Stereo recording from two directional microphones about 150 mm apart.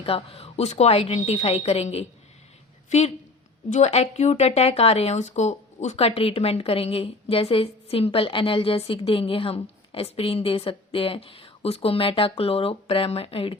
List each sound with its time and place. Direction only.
0.0 s a woman's voice: 40° left (ahead or behind)
3.7 s speech: 50° left (ahead or behind)